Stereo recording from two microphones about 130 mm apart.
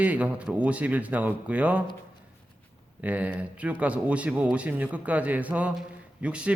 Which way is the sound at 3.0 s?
10° right (ahead or behind).